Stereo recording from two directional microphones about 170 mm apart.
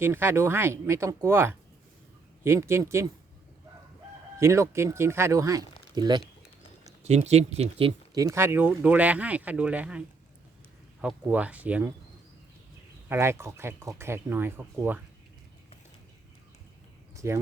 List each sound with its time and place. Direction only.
0.0 s speech: 15° right (ahead or behind)
4.4 s speech: 15° right (ahead or behind)
7.0 s speech: 40° right (ahead or behind)
8.1 s speech: 20° right (ahead or behind)
11.0 s speech: 10° right (ahead or behind)
13.1 s speech: 15° right (ahead or behind)
17.2 s speech: 15° right (ahead or behind)